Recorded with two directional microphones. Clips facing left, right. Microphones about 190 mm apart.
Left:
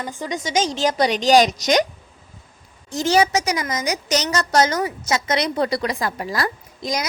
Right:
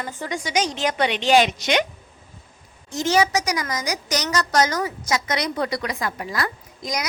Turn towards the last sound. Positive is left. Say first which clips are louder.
# left 3 dB
turn(degrees=30)  # may be behind; listen again after turning